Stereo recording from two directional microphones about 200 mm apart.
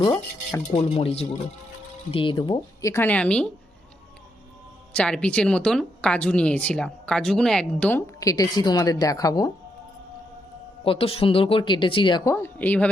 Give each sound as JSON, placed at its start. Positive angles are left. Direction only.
{"t": 0.0, "sound": "speech", "side_deg": 15}
{"t": 0.7, "sound": "speech", "side_deg": 30}
{"t": 4.9, "sound": "speech", "side_deg": 5}
{"t": 10.8, "sound": "speech", "side_deg": 30}